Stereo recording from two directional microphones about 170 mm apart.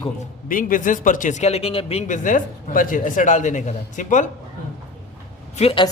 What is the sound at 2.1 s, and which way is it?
Speech, 50° left (ahead or behind).